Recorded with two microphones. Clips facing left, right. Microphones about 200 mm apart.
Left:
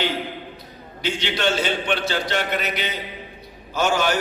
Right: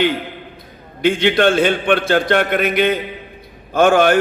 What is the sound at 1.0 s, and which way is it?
A man's voice, 55° right (ahead or behind).